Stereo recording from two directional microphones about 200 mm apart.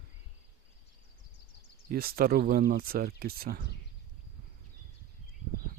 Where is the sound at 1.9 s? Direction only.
50° right (ahead or behind).